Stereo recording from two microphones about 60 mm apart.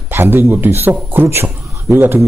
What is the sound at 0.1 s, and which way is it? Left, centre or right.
A man's voice, right.